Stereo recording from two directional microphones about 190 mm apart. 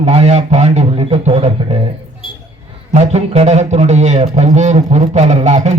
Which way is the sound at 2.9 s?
35° right (ahead or behind).